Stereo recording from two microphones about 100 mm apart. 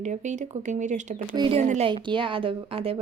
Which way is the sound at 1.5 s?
65° right (ahead or behind).